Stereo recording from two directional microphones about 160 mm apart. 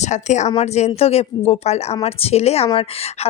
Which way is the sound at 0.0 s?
45° left (ahead or behind).